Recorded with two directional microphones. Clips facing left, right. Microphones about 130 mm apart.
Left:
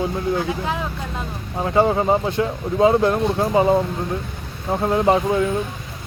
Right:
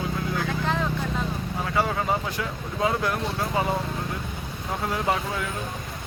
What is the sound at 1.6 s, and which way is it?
Speech, 30° left (ahead or behind).